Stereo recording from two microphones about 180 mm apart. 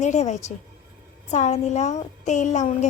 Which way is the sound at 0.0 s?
40° left (ahead or behind).